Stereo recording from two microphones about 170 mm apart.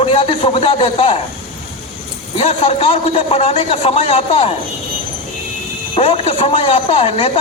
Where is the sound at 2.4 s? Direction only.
35° left (ahead or behind).